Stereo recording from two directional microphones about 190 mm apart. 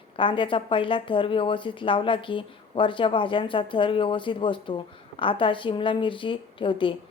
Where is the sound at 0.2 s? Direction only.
25° left (ahead or behind).